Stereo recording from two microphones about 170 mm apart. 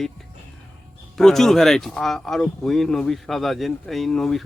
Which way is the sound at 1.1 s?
Centre (ahead or behind).